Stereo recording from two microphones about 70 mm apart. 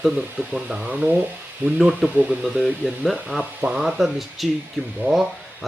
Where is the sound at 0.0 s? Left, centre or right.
Centre.